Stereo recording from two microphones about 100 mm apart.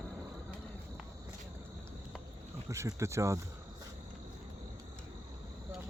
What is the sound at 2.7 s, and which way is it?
Speech, 30° right (ahead or behind).